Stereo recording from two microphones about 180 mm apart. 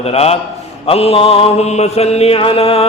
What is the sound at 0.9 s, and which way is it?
Mantra, 30° left (ahead or behind).